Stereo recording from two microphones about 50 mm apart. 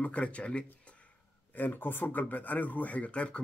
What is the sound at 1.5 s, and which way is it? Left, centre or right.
Speech, left.